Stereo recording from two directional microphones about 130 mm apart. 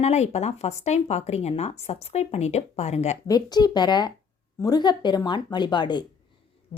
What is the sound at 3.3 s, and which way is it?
Speech, 30° left (ahead or behind).